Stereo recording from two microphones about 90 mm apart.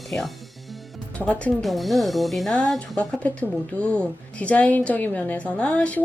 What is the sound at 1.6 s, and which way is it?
Speech, centre (ahead or behind).